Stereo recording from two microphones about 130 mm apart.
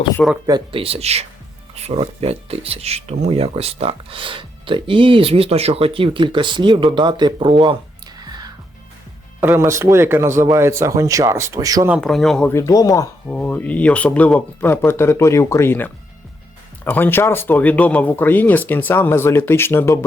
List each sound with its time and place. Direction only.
0.2 s speech: 5° left (ahead or behind)
0.7 s speech: 45° right (ahead or behind)
8.2 s music: 30° right (ahead or behind)
9.4 s speech: 20° right (ahead or behind)
11.9 s speech: centre (ahead or behind)
12.5 s speech: 25° left (ahead or behind)
13.2 s speech: 10° left (ahead or behind)